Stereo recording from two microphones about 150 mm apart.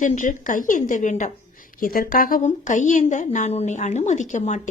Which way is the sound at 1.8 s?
70° left (ahead or behind).